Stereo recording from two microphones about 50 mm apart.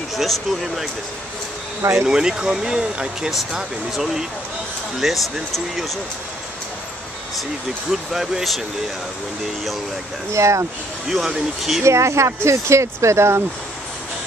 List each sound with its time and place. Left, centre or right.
0.1 s speech: centre
2.0 s speech: centre
7.9 s speech: centre
10.3 s speech: right
11.1 s speech: centre
11.8 s speech: right